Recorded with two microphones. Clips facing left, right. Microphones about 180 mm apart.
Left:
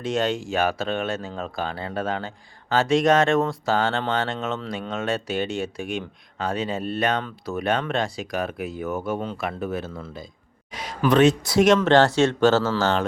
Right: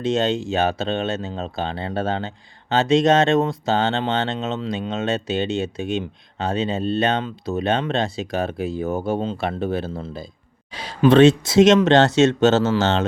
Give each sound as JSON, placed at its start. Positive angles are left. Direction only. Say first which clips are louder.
{"t": 0.0, "sound": "speech", "louder": "right 4 dB", "side_deg": -25}